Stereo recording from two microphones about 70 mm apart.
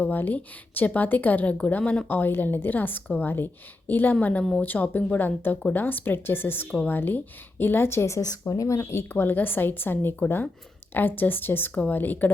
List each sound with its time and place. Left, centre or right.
0.0 s a woman's voice: left
2.0 s a woman's voice: left
8.3 s a woman's voice: left